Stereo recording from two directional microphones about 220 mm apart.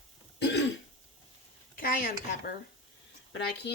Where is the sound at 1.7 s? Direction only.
40° left (ahead or behind).